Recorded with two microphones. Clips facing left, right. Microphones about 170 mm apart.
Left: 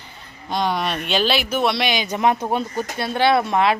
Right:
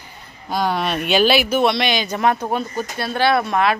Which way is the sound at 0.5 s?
5° right (ahead or behind).